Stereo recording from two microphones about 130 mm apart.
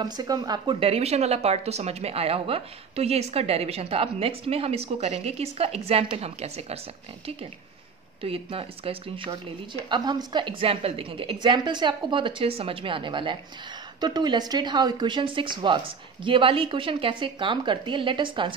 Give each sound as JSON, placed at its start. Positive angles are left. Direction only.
{"t": 0.0, "sound": "a woman's voice", "side_deg": -30}
{"t": 0.7, "sound": "a woman's voice", "side_deg": -50}
{"t": 8.2, "sound": "a woman's voice", "side_deg": -45}
{"t": 9.9, "sound": "a woman's voice", "side_deg": -35}